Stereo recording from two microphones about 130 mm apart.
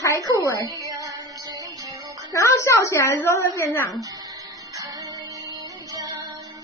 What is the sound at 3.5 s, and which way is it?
Speech, 15° left (ahead or behind).